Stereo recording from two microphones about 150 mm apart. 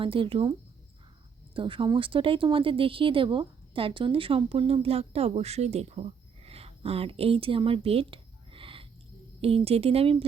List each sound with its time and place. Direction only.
0.0 s speech: 35° right (ahead or behind)
1.5 s speech: 35° right (ahead or behind)